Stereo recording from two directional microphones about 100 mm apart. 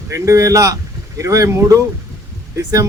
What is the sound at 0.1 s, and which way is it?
Speech, 30° right (ahead or behind).